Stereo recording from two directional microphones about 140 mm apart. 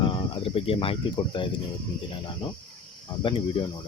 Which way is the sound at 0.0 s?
40° left (ahead or behind).